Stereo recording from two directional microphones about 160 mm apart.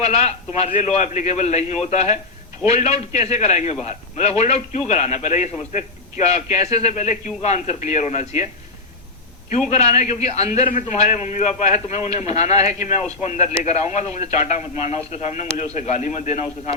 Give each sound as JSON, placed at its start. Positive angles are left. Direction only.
{"t": 0.0, "sound": "a man's voice", "side_deg": 40}
{"t": 9.5, "sound": "a man's voice", "side_deg": 45}